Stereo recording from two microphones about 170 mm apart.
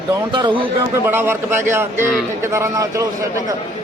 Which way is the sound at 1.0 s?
15° right (ahead or behind).